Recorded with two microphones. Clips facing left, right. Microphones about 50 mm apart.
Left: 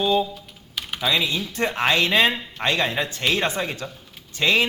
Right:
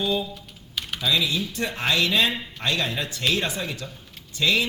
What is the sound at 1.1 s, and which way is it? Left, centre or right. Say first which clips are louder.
A man's voice: left 1 dB; left.